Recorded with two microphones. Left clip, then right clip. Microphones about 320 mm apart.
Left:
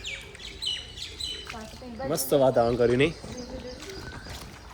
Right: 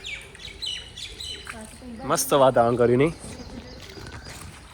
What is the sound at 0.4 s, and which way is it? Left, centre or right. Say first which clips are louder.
Squawk: left 1 dB; left.